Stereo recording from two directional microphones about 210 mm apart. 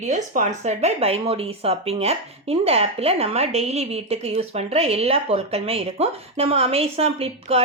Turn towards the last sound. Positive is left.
turn(degrees=-30)  # may be behind; listen again after turning